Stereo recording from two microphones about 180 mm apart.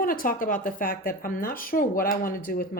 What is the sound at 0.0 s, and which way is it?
Speech, 50° left (ahead or behind).